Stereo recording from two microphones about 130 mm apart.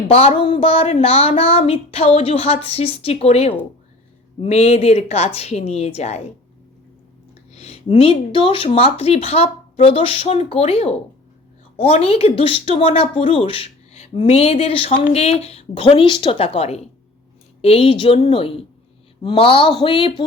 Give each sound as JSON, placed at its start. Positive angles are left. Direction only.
{"t": 0.1, "sound": "speech", "side_deg": 50}
{"t": 7.5, "sound": "speech", "side_deg": 55}